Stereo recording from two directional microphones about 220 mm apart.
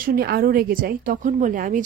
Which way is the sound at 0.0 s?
45° right (ahead or behind).